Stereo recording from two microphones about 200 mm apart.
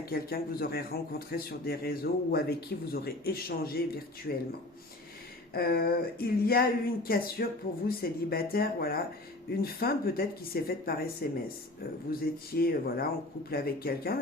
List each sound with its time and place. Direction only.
0.0 s speech: 50° left (ahead or behind)
5.5 s speech: 50° left (ahead or behind)